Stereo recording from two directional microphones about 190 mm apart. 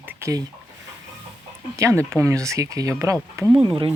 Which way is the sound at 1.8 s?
15° right (ahead or behind).